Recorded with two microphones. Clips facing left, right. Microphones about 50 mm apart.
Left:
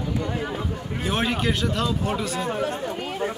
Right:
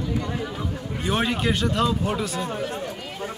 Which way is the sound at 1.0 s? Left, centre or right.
Centre.